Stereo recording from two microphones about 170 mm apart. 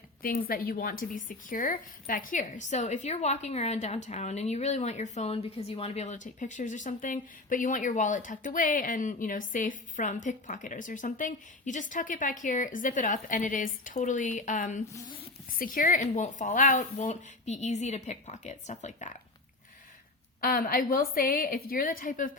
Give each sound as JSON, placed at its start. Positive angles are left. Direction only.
{"t": 0.2, "sound": "a woman's voice", "side_deg": 55}
{"t": 20.4, "sound": "a woman's voice", "side_deg": 55}